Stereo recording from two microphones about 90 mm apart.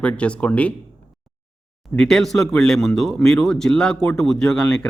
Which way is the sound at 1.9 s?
5° left (ahead or behind).